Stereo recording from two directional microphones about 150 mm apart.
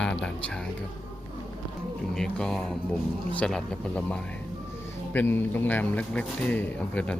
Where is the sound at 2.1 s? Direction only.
5° left (ahead or behind).